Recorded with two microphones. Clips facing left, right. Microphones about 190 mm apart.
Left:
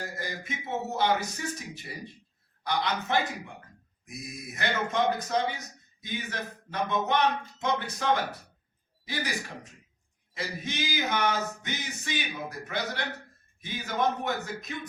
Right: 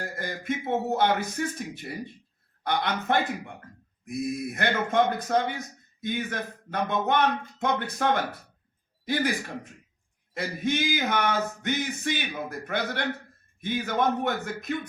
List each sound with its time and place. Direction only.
0.0 s a man's voice: 55° right (ahead or behind)
10.3 s a man's voice: 55° right (ahead or behind)